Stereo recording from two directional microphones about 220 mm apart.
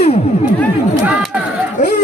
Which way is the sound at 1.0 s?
5° right (ahead or behind).